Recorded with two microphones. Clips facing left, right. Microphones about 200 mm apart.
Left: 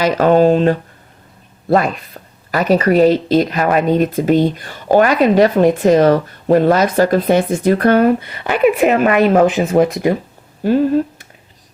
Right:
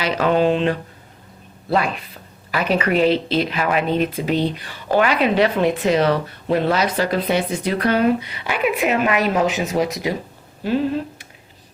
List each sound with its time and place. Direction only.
0.0 s speech: 45° left (ahead or behind)